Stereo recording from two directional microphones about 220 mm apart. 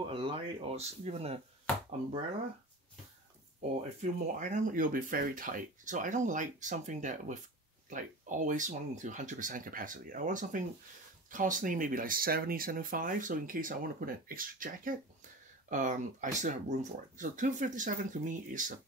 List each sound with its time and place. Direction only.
0.0 s speech: 25° right (ahead or behind)
4.0 s speech: 35° right (ahead or behind)